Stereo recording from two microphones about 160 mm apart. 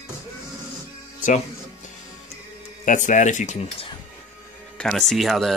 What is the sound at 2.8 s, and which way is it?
Speech, 50° left (ahead or behind).